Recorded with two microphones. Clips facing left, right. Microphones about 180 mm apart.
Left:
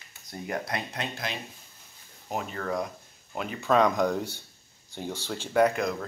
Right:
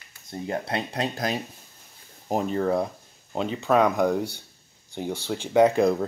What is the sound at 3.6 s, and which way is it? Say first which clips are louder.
Speech: right 2 dB; 10° right (ahead or behind).